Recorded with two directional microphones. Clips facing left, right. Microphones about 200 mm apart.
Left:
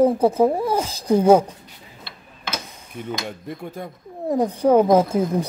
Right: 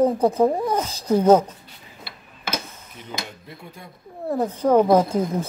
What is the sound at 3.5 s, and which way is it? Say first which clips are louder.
Speech: left 10 dB; 50° left (ahead or behind).